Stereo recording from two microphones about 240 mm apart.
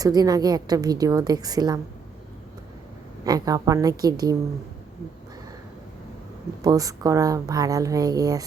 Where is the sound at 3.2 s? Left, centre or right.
Centre.